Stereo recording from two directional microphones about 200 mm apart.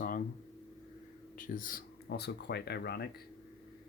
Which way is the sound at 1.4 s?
45° left (ahead or behind).